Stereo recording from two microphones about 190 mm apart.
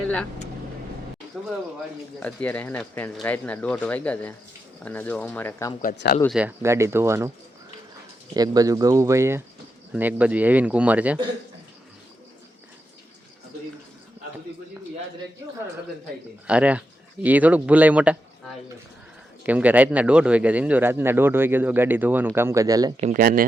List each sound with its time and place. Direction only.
1.3 s speech: 5° left (ahead or behind)
6.2 s speech: 5° right (ahead or behind)
8.3 s speech: 20° right (ahead or behind)
16.5 s speech: 5° right (ahead or behind)
19.5 s speech: 10° right (ahead or behind)
23.0 s speech: 35° right (ahead or behind)
23.2 s speech: 50° right (ahead or behind)